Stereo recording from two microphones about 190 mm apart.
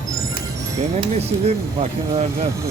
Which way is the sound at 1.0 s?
35° right (ahead or behind).